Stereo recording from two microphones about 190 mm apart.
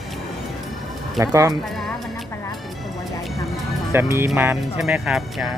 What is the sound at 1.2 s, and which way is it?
Speech, 15° right (ahead or behind).